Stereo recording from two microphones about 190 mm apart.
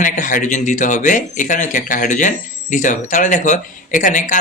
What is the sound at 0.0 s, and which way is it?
Speech, 45° left (ahead or behind).